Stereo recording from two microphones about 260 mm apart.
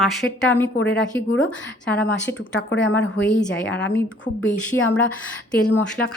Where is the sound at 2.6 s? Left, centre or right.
Left.